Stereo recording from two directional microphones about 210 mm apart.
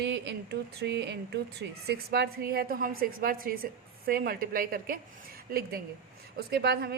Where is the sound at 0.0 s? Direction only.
55° right (ahead or behind).